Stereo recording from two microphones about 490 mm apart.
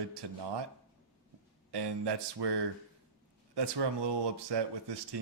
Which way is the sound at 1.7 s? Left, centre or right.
Right.